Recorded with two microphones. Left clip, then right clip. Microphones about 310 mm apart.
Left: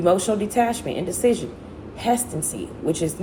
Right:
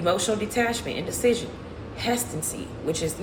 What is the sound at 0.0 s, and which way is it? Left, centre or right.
A woman's voice, centre.